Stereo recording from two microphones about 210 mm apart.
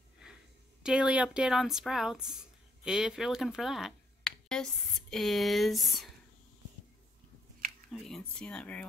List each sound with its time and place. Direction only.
0.8 s a woman's voice: 5° right (ahead or behind)
7.9 s a woman's voice: centre (ahead or behind)